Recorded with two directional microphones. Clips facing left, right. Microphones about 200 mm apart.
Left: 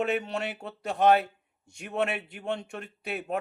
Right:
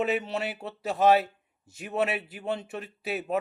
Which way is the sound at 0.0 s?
5° right (ahead or behind).